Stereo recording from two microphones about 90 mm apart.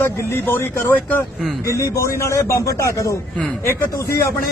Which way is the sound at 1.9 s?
35° left (ahead or behind).